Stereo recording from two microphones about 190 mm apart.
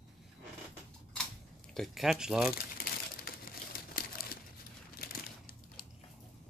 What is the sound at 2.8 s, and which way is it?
Crumpling, 50° left (ahead or behind).